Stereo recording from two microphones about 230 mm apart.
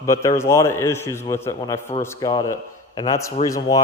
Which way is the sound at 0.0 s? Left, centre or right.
Centre.